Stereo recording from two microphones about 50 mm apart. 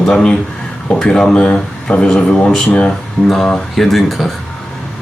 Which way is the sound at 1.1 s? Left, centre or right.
Centre.